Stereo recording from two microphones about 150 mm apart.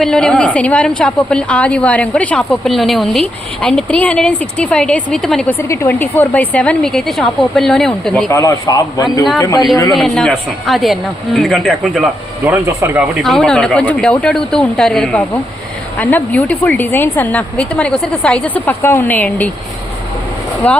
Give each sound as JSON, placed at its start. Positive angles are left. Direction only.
{"t": 0.0, "sound": "a woman's voice", "side_deg": 5}
{"t": 5.5, "sound": "a woman's voice", "side_deg": 20}
{"t": 8.3, "sound": "a man's voice", "side_deg": 20}
{"t": 9.9, "sound": "speech", "side_deg": 0}
{"t": 12.5, "sound": "speech", "side_deg": -15}
{"t": 13.2, "sound": "a woman's voice", "side_deg": 5}
{"t": 20.7, "sound": "a woman's voice", "side_deg": 10}